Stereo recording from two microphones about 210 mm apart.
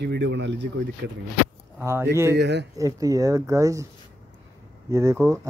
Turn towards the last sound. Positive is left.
turn(degrees=-15)  # may be behind; listen again after turning